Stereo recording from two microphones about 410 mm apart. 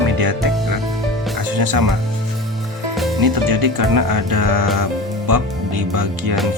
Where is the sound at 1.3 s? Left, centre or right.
Right.